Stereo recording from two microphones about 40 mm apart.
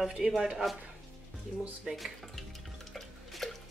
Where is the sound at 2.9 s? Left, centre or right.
Centre.